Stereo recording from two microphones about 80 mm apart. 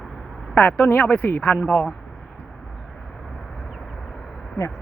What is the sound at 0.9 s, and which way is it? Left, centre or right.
Speech, left.